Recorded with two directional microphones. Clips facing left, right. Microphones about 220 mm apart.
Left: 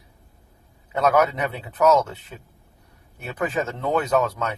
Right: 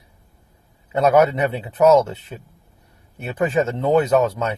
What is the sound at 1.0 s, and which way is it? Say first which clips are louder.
Speech: right 4 dB; 25° right (ahead or behind).